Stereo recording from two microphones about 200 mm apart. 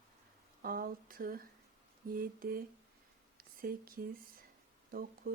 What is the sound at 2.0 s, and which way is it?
Speech, 45° right (ahead or behind).